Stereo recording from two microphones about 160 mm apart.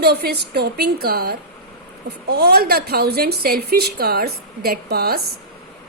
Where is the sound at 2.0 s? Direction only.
90° right.